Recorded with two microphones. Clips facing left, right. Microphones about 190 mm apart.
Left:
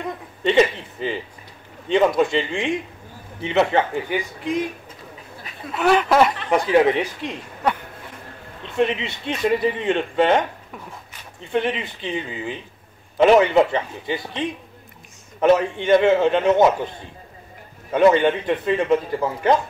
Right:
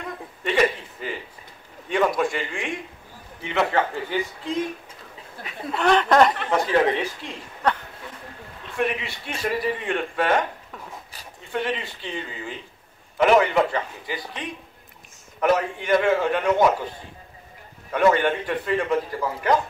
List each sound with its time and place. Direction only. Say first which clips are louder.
0.4 s a man's voice: left 4 dB; 25° left (ahead or behind)
5.8 s speech: left 1 dB; 5° left (ahead or behind)
6.5 s a man's voice: left 4 dB; 15° left (ahead or behind)
8.7 s a man's voice: left 5 dB; 20° left (ahead or behind)
11.5 s a man's voice: left 4 dB; 20° left (ahead or behind)
17.9 s a man's voice: left 4 dB; 20° left (ahead or behind)